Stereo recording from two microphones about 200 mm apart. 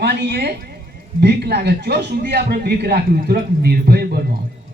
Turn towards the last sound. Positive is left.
turn(degrees=-50)  # may be behind; listen again after turning